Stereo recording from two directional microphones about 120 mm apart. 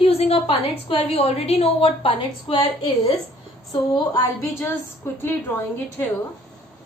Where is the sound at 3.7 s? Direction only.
30° left (ahead or behind).